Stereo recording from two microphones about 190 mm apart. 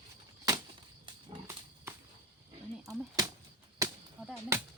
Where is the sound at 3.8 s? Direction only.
15° right (ahead or behind).